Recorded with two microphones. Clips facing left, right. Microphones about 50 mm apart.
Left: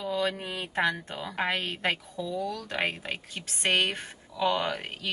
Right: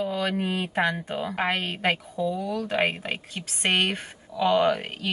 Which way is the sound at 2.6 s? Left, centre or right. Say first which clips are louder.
Right 5 dB; centre.